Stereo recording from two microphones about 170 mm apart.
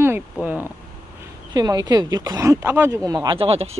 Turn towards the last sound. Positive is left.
turn(degrees=-35)  # may be behind; listen again after turning